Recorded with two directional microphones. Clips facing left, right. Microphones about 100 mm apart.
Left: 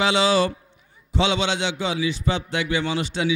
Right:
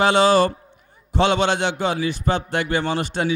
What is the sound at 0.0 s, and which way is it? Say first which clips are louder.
A man's voice: right 4 dB; 50° right (ahead or behind).